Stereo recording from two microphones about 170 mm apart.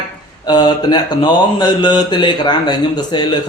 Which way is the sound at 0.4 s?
25° left (ahead or behind).